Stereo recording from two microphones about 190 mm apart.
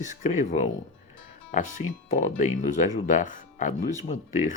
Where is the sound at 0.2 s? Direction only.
40° left (ahead or behind).